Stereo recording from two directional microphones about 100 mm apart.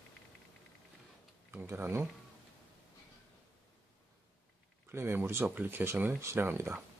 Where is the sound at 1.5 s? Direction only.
25° right (ahead or behind).